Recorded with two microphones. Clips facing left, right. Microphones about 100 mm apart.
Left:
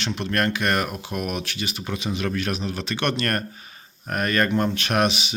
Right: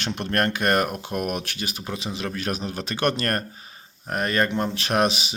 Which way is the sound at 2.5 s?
40° right (ahead or behind).